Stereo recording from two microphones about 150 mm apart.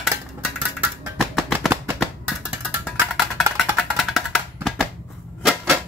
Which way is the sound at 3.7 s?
Centre (ahead or behind).